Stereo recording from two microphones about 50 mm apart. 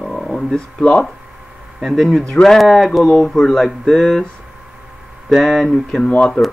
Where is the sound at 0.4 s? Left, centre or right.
Centre.